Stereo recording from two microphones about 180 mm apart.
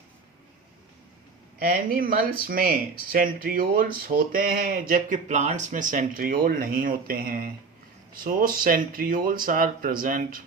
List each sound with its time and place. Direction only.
1.5 s speech: 50° right (ahead or behind)